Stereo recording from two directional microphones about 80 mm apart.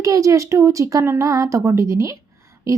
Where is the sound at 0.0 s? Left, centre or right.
Right.